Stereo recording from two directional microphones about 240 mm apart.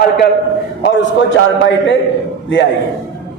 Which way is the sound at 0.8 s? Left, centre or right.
Left.